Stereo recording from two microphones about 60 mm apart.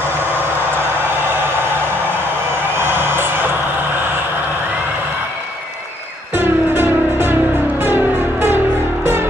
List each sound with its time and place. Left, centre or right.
2.8 s music: right
6.3 s music: right